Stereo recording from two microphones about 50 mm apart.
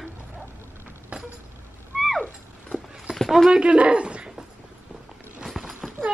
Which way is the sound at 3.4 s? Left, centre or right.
Right.